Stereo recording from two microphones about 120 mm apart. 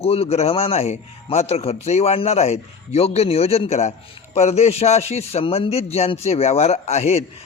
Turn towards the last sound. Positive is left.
turn(degrees=65)  # may be behind; listen again after turning